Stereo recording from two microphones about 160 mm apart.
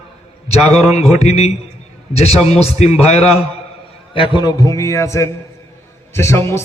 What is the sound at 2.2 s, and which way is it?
A man's voice, 40° left (ahead or behind).